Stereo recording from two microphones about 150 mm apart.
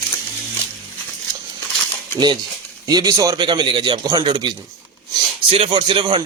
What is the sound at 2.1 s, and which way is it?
A man's voice, 30° right (ahead or behind).